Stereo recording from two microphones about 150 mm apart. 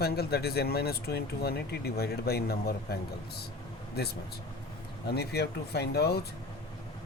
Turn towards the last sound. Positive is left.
turn(degrees=90)